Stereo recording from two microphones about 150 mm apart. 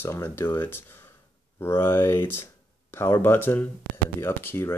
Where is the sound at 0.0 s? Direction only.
15° left (ahead or behind).